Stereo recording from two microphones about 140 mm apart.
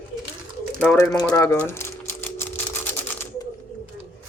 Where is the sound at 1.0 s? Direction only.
25° left (ahead or behind).